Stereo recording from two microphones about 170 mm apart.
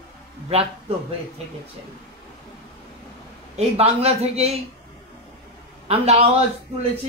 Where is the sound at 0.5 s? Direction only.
35° right (ahead or behind).